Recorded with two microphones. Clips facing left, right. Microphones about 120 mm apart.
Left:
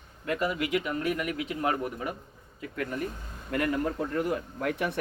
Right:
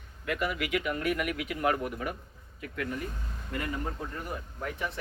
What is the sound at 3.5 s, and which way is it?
Speech, 65° left (ahead or behind).